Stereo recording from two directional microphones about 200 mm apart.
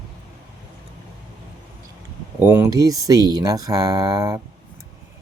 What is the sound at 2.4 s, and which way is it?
Speech, 10° right (ahead or behind).